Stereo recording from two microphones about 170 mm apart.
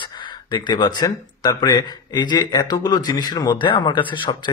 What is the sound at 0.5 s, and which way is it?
A man's voice, 25° left (ahead or behind).